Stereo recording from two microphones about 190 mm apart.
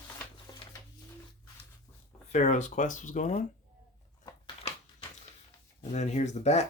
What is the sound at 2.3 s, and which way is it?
Speech, 40° left (ahead or behind).